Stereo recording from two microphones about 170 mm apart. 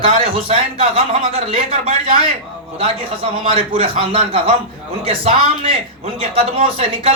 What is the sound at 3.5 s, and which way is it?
Speech, 35° right (ahead or behind).